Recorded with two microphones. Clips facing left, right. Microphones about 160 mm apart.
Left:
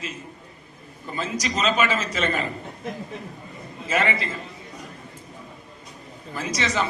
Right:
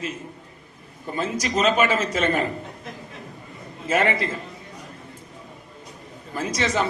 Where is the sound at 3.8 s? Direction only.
50° right (ahead or behind).